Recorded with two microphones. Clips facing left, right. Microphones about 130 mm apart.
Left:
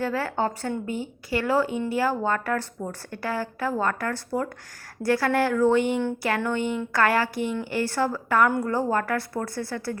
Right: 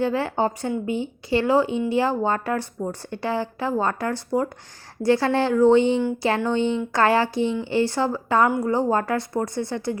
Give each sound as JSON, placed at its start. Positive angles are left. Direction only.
{"t": 0.0, "sound": "speech", "side_deg": -20}